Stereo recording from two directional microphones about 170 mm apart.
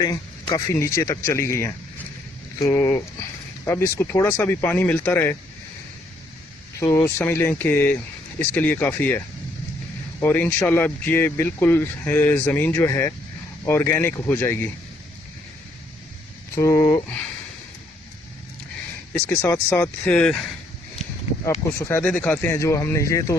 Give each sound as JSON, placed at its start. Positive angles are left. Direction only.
{"t": 0.0, "sound": "speech", "side_deg": 20}
{"t": 6.7, "sound": "speech", "side_deg": 15}
{"t": 16.6, "sound": "speech", "side_deg": 15}
{"t": 19.3, "sound": "speech", "side_deg": 15}
{"t": 21.6, "sound": "speech", "side_deg": 15}